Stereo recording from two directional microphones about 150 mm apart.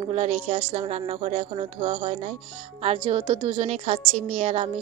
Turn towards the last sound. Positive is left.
turn(degrees=-45)  # may be behind; listen again after turning